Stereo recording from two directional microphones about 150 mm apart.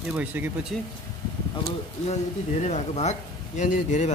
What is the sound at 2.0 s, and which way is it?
Speech, 50° left (ahead or behind).